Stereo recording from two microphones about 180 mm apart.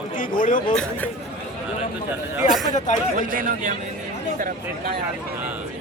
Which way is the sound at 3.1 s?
45° right (ahead or behind).